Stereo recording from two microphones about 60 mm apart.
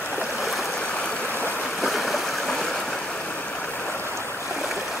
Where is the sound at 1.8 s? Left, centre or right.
Centre.